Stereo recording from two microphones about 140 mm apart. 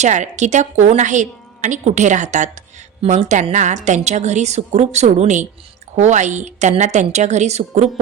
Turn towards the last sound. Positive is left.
turn(degrees=-55)  # may be behind; listen again after turning